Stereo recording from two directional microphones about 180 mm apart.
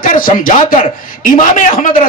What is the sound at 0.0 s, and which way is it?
Speech, 50° left (ahead or behind).